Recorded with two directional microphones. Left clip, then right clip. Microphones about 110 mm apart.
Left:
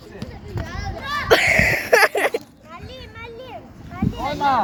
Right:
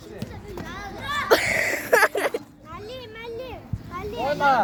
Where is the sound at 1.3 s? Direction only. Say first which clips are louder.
Left 6 dB; 30° left (ahead or behind).